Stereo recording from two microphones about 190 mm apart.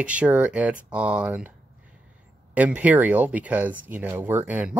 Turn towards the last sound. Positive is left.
turn(degrees=-10)  # may be behind; listen again after turning